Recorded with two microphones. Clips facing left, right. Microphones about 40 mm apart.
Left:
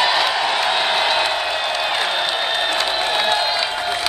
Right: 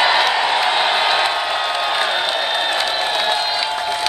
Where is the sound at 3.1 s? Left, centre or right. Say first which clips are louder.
Even; centre.